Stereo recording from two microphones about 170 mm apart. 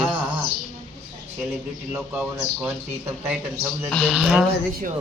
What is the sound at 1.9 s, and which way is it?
Speech, 10° right (ahead or behind).